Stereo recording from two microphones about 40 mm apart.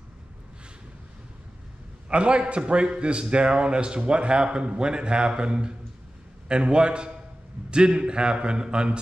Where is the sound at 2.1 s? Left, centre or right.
Right.